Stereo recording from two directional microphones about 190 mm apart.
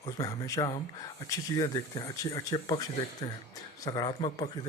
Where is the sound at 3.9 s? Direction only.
25° left (ahead or behind).